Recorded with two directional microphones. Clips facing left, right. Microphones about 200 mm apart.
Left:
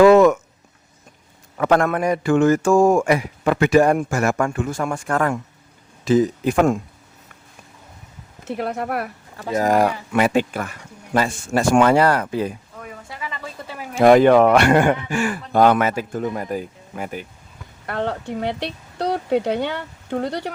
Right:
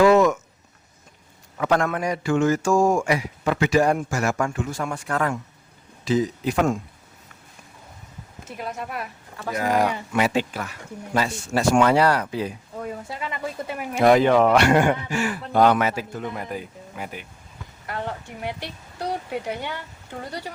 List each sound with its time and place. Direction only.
0.0 s a sound: 60° left (ahead or behind)
1.5 s a man's voice: 55° left (ahead or behind)
8.4 s a man's voice: 60° left (ahead or behind)
9.6 s speech: 45° left (ahead or behind)
13.1 s speech: 25° right (ahead or behind)
14.0 s speech: 50° left (ahead or behind)
17.8 s speech: 70° left (ahead or behind)